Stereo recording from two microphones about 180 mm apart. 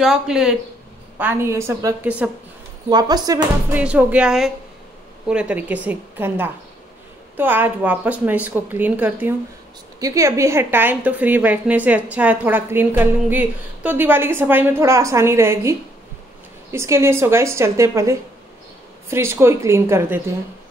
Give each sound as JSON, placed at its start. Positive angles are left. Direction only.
{"t": 0.0, "sound": "a woman's voice", "side_deg": 0}
{"t": 2.9, "sound": "speech", "side_deg": -20}
{"t": 3.7, "sound": "a woman's voice", "side_deg": -10}
{"t": 16.7, "sound": "a woman's voice", "side_deg": -15}